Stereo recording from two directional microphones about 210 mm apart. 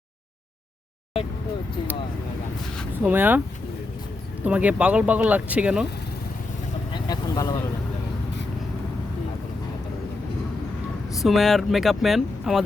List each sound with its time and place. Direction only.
3.0 s speech: 10° right (ahead or behind)
4.4 s speech: 5° right (ahead or behind)
6.9 s speech: 20° left (ahead or behind)
11.2 s speech: centre (ahead or behind)